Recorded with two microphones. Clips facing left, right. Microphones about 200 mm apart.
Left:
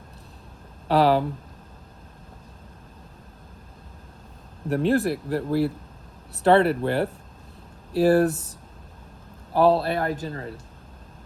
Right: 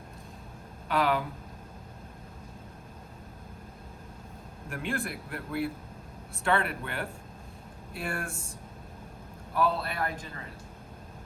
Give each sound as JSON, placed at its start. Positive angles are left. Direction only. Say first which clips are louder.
{"t": 0.9, "sound": "a man's voice", "louder": "left 8 dB", "side_deg": 35}
{"t": 4.7, "sound": "a man's voice", "louder": "left 13 dB", "side_deg": 35}
{"t": 9.5, "sound": "a man's voice", "louder": "left 10 dB", "side_deg": 30}